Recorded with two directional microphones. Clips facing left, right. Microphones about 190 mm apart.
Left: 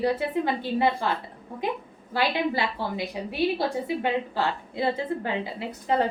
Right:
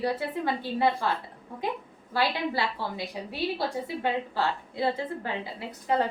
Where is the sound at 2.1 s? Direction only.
20° left (ahead or behind).